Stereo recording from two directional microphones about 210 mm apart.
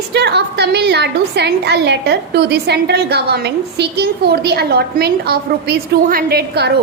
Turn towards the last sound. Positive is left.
turn(degrees=-50)  # may be behind; listen again after turning